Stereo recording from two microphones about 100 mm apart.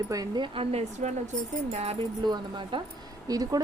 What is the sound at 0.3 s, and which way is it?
Speech, 60° right (ahead or behind).